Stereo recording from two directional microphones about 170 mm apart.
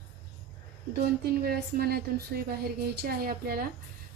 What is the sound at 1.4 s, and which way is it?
A woman's voice, 65° right (ahead or behind).